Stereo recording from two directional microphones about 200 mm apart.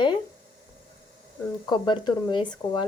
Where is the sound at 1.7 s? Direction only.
20° left (ahead or behind).